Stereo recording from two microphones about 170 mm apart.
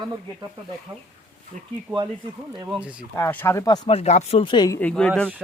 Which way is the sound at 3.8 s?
40° left (ahead or behind).